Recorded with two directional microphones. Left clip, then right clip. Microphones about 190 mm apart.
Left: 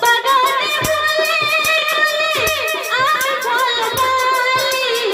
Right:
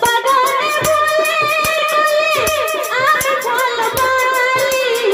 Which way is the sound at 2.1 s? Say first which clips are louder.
Right 2 dB; 20° right (ahead or behind).